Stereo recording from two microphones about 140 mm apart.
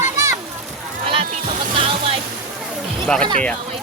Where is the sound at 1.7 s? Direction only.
40° right (ahead or behind).